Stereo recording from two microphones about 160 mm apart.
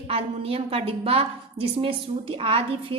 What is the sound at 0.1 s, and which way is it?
A woman's voice, 35° right (ahead or behind).